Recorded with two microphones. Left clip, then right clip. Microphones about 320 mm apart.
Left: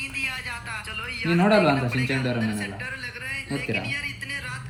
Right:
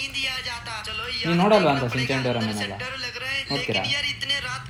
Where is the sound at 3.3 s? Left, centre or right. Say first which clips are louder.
Right 3 dB; centre.